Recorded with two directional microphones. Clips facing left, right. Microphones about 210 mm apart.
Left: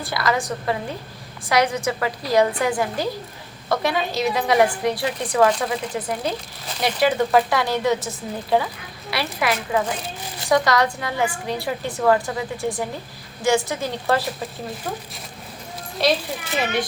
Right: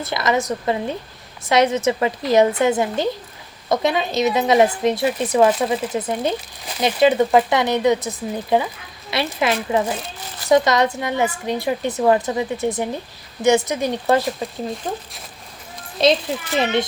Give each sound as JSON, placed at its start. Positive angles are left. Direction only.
{"t": 0.0, "sound": "speech", "side_deg": -20}
{"t": 16.0, "sound": "speech", "side_deg": -20}